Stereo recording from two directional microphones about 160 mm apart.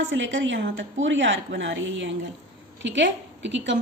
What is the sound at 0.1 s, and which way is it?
Speech, 90° right.